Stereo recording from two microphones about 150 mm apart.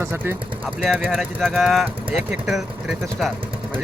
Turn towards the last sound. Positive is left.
turn(degrees=0)  # may be behind; listen again after turning